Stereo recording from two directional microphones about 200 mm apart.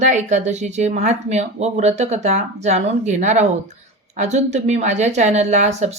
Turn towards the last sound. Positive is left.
turn(degrees=-35)  # may be behind; listen again after turning